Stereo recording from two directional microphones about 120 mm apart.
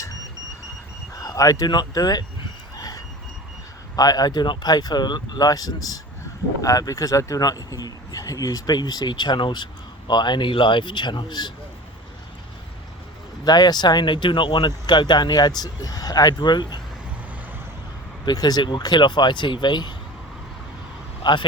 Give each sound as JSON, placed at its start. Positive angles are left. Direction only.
{"t": 1.2, "sound": "speech", "side_deg": 30}
{"t": 2.7, "sound": "reversing beeps", "side_deg": 30}
{"t": 3.9, "sound": "speech", "side_deg": 35}
{"t": 13.4, "sound": "speech", "side_deg": 35}
{"t": 18.3, "sound": "speech", "side_deg": 35}
{"t": 21.2, "sound": "speech", "side_deg": 40}